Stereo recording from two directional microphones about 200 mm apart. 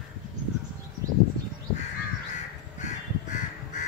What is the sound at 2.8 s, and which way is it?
Crow, 40° left (ahead or behind).